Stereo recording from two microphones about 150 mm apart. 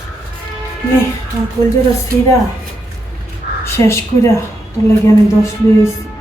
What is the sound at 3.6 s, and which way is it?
Speech, 20° left (ahead or behind).